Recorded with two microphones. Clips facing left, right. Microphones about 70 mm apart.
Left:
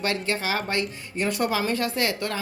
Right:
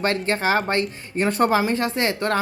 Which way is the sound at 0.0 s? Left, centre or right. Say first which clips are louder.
Right 5 dB; right.